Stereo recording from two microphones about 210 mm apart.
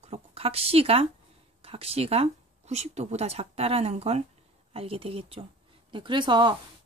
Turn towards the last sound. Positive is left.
turn(degrees=-20)  # may be behind; listen again after turning